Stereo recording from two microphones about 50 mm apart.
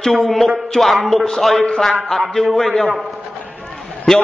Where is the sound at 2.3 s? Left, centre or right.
Centre.